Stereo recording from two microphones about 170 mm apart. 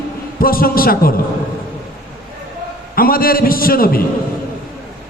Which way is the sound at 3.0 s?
60° left (ahead or behind).